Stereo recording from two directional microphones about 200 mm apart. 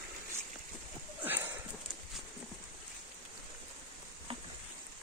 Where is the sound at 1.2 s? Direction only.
10° right (ahead or behind).